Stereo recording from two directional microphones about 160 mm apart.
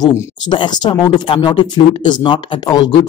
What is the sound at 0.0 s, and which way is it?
Speech, 25° left (ahead or behind).